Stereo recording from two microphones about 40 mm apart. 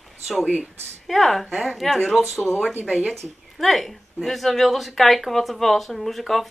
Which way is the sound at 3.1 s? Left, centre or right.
Centre.